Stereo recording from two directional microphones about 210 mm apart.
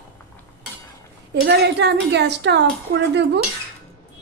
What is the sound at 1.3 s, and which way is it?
A woman's voice, 55° right (ahead or behind).